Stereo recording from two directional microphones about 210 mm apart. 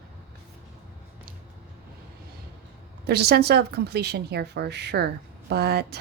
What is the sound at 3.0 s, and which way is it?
A woman's voice, 50° right (ahead or behind).